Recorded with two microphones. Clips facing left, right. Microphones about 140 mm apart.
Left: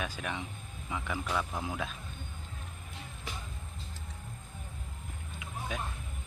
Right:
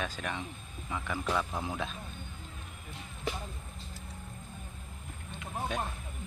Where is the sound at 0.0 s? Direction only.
10° left (ahead or behind).